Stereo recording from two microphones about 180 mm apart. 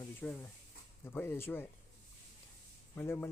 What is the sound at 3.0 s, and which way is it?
Speech, 15° left (ahead or behind).